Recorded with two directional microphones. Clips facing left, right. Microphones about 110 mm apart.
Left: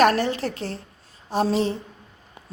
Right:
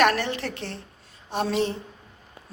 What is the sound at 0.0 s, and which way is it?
A woman's voice, 35° left (ahead or behind).